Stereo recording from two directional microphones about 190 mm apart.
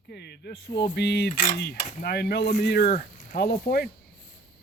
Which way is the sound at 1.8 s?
40° left (ahead or behind).